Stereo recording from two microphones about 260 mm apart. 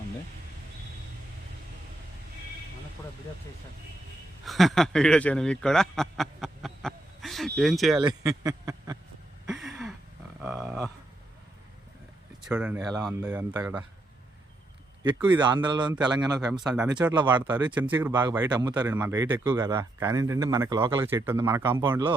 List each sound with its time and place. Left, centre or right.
4.4 s speech: centre
8.0 s speech: centre
9.5 s a sound: centre
10.4 s speech: centre
12.5 s speech: centre
15.0 s speech: centre
16.6 s speech: centre